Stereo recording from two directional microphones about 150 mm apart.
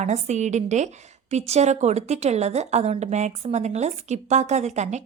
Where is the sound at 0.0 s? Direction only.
50° right (ahead or behind).